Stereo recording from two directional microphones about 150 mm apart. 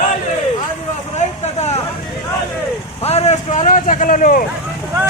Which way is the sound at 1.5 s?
45° left (ahead or behind).